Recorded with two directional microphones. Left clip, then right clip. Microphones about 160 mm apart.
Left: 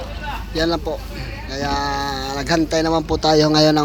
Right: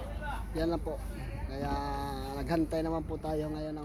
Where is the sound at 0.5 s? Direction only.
Centre (ahead or behind).